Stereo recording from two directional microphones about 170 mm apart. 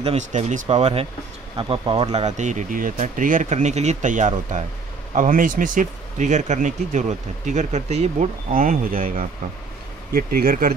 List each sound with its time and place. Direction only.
0.0 s speech: 40° right (ahead or behind)
2.2 s speech: 45° right (ahead or behind)